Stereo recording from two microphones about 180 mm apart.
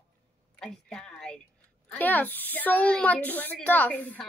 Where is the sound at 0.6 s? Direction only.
5° left (ahead or behind).